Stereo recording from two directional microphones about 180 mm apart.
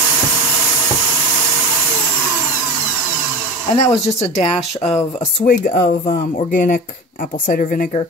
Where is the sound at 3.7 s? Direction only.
40° left (ahead or behind).